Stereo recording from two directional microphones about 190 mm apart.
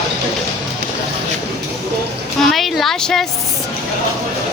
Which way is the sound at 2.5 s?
Centre (ahead or behind).